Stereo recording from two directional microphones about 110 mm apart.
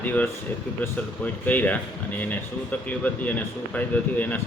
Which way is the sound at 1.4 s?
15° left (ahead or behind).